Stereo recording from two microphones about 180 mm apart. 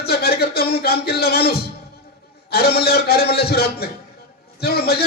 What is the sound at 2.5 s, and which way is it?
A man's voice, 60° left (ahead or behind).